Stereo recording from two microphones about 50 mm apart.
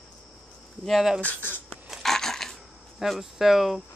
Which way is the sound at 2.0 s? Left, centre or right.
Centre.